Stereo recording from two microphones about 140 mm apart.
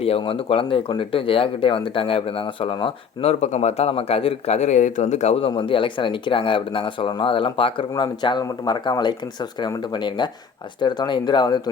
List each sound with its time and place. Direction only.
0.0 s speech: 45° left (ahead or behind)
5.5 s speech: 35° left (ahead or behind)